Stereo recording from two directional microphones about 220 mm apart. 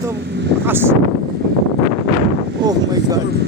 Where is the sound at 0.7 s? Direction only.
10° right (ahead or behind).